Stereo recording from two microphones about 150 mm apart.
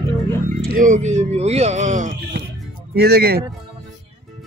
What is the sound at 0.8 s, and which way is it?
Speech, 55° right (ahead or behind).